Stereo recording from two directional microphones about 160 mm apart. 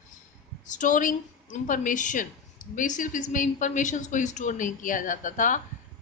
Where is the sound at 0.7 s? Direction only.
50° left (ahead or behind).